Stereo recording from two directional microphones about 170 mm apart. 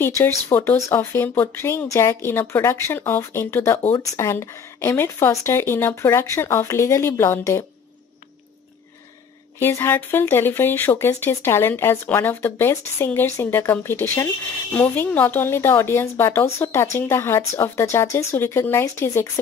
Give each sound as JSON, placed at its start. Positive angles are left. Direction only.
{"t": 0.0, "sound": "speech", "side_deg": 15}
{"t": 9.6, "sound": "speech", "side_deg": 15}